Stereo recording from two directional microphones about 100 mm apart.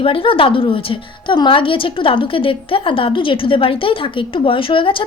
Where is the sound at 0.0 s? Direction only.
60° left (ahead or behind).